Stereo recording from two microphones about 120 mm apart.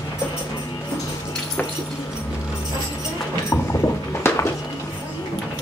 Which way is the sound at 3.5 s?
20° left (ahead or behind).